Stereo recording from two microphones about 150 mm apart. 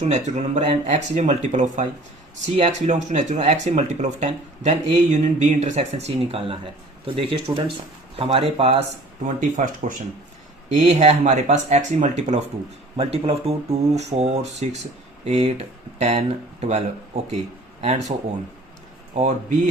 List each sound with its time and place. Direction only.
0.0 s speech: 50° right (ahead or behind)
9.2 s speech: 55° right (ahead or behind)
10.8 s speech: 50° right (ahead or behind)
13.0 s speech: 40° right (ahead or behind)
19.1 s speech: 50° right (ahead or behind)